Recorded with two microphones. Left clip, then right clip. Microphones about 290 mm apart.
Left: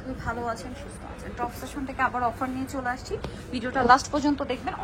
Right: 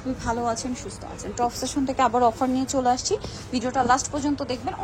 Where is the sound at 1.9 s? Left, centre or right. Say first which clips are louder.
Right 5 dB; right.